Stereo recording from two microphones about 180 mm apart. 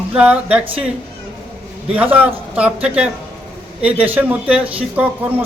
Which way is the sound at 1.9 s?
10° right (ahead or behind).